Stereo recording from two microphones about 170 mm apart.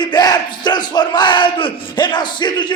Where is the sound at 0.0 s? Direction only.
25° left (ahead or behind).